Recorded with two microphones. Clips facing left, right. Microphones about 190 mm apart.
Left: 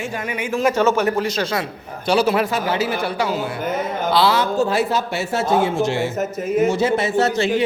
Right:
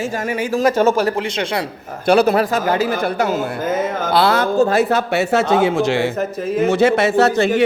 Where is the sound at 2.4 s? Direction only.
45° right (ahead or behind).